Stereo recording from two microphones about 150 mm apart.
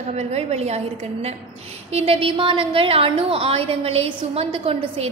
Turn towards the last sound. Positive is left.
turn(degrees=-40)  # may be behind; listen again after turning